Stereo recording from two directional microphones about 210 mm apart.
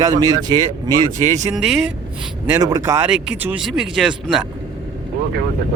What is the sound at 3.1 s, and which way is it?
Speech, 5° right (ahead or behind).